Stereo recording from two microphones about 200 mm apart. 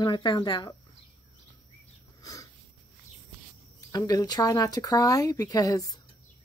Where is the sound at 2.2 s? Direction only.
20° left (ahead or behind).